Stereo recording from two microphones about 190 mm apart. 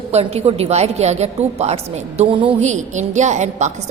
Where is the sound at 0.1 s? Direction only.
35° right (ahead or behind).